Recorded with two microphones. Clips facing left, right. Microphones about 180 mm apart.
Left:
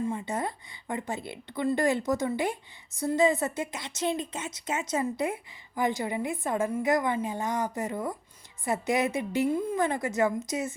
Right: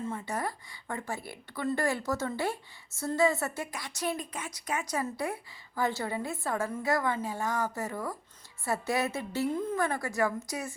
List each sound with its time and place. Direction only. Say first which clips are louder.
0.0 s a woman's voice: left 3 dB; 15° left (ahead or behind)